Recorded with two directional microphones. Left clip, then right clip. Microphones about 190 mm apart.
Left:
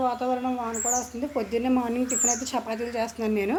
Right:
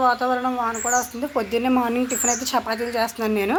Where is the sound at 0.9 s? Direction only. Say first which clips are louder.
Right 6 dB; centre (ahead or behind).